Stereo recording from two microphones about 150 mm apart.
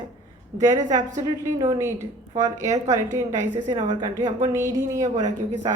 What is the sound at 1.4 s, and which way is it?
A woman's voice, 20° right (ahead or behind).